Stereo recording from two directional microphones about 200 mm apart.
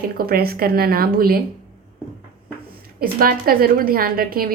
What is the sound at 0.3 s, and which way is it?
A woman's voice, 50° right (ahead or behind).